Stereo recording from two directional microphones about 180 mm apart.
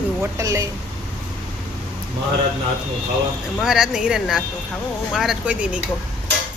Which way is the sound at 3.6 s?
5° right (ahead or behind).